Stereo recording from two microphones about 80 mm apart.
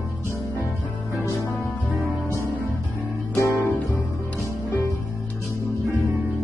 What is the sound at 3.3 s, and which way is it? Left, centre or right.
Music, left.